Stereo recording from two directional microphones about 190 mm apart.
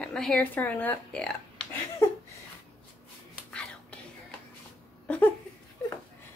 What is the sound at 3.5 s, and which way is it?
Whispering, 5° left (ahead or behind).